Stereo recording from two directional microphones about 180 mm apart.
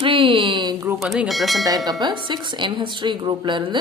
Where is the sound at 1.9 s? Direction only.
25° right (ahead or behind).